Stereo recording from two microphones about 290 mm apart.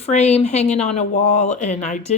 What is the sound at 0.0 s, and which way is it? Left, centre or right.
A woman's voice, left.